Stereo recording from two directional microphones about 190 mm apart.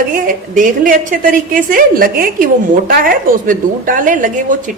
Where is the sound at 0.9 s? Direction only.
45° right (ahead or behind).